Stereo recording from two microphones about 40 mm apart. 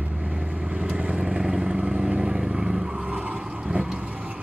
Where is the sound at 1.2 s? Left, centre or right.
Centre.